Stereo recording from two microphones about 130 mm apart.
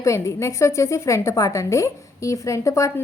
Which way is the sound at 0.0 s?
25° left (ahead or behind).